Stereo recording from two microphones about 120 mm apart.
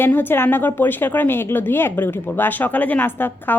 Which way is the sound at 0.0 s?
15° left (ahead or behind).